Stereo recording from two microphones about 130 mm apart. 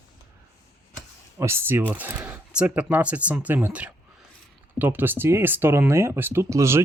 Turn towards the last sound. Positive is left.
turn(degrees=-20)  # may be behind; listen again after turning